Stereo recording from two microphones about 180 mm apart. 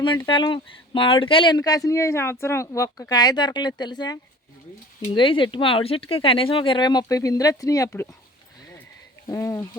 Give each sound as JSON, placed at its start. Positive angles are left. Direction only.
{"t": 0.3, "sound": "speech", "side_deg": 25}
{"t": 9.2, "sound": "speech", "side_deg": 15}